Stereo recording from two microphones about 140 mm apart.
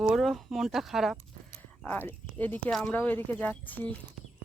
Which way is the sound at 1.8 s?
10° left (ahead or behind).